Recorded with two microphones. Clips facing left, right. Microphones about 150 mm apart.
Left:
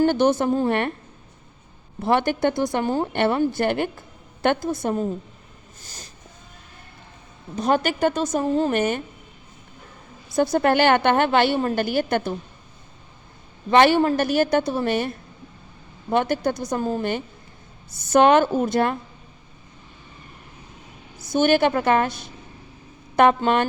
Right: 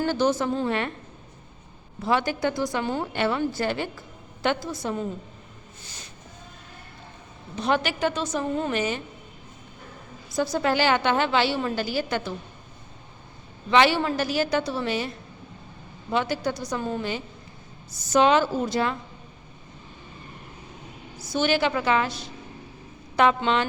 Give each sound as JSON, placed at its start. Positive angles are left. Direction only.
{"t": 0.0, "sound": "a woman's voice", "side_deg": 60}
{"t": 2.0, "sound": "a woman's voice", "side_deg": 55}
{"t": 2.7, "sound": "a woman's voice", "side_deg": 45}
{"t": 3.1, "sound": "a woman's voice", "side_deg": 55}
{"t": 5.8, "sound": "a sound", "side_deg": 40}
{"t": 7.5, "sound": "a woman's voice", "side_deg": 45}
{"t": 10.3, "sound": "a woman's voice", "side_deg": 55}
{"t": 13.7, "sound": "a woman's voice", "side_deg": 50}
{"t": 16.1, "sound": "a woman's voice", "side_deg": 50}
{"t": 16.7, "sound": "a woman's voice", "side_deg": 40}
{"t": 17.0, "sound": "a woman's voice", "side_deg": 55}
{"t": 21.2, "sound": "a woman's voice", "side_deg": 50}